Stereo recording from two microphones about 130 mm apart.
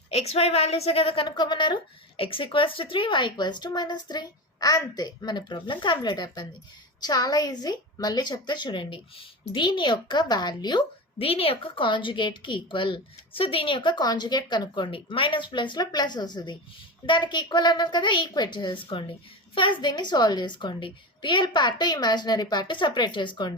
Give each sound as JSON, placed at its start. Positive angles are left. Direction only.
{"t": 0.1, "sound": "a woman's voice", "side_deg": 55}